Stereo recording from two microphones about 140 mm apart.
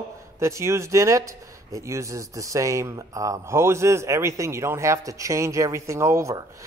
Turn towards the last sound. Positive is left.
turn(degrees=-20)  # may be behind; listen again after turning